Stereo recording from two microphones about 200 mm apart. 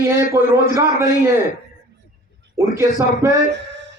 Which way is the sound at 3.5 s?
60° right (ahead or behind).